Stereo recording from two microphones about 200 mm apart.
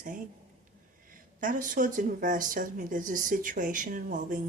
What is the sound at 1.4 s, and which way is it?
A woman's voice, 40° right (ahead or behind).